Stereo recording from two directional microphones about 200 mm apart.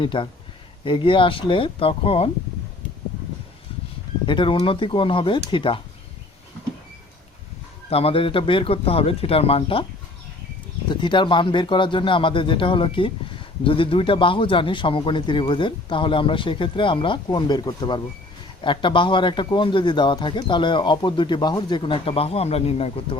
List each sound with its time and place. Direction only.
0.0 s a man's voice: 25° left (ahead or behind)
4.3 s a man's voice: 25° left (ahead or behind)
7.9 s a man's voice: 30° left (ahead or behind)
10.8 s a man's voice: 25° left (ahead or behind)